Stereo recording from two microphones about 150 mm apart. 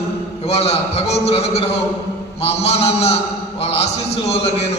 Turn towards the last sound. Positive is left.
turn(degrees=40)  # may be behind; listen again after turning